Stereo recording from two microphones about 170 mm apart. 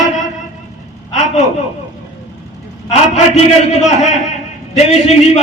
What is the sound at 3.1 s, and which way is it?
Speech, 40° left (ahead or behind).